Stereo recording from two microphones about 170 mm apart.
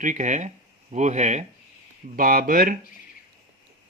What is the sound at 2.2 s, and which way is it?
Speech, 55° right (ahead or behind).